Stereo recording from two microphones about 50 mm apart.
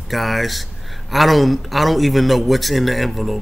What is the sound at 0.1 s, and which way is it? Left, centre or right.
Speech, centre.